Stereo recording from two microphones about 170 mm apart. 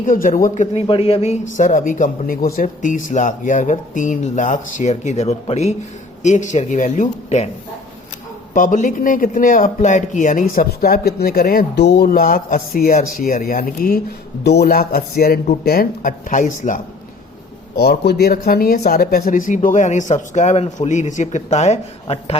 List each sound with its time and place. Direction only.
0.0 s speech: 55° left (ahead or behind)
8.5 s a man's voice: 50° left (ahead or behind)
14.4 s a man's voice: 75° left (ahead or behind); by 16.8 s 50° left (ahead or behind)
17.7 s speech: 75° left (ahead or behind); by 22.4 s 35° left (ahead or behind)